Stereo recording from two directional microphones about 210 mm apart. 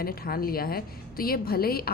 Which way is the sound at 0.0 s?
45° left (ahead or behind).